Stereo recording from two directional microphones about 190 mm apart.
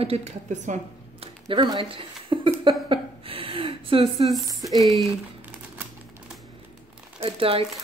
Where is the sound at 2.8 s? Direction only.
30° right (ahead or behind).